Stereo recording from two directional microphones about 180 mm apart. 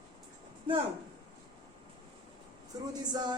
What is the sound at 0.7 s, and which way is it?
Speech, 30° right (ahead or behind).